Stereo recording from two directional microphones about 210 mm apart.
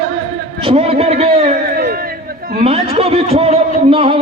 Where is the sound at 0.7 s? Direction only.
30° right (ahead or behind).